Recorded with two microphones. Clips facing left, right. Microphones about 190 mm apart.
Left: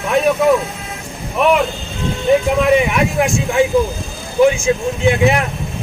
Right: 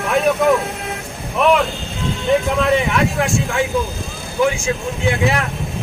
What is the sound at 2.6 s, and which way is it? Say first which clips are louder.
Speech: left 3 dB; 15° left (ahead or behind).